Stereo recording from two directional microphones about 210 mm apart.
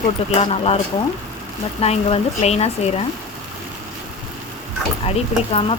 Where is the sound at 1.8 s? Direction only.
30° left (ahead or behind).